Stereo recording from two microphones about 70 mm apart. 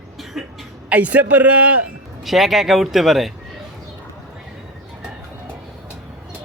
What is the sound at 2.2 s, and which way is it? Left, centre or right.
Speech, centre.